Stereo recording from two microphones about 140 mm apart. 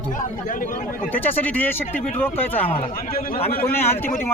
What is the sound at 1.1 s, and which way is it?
Speech, 15° left (ahead or behind).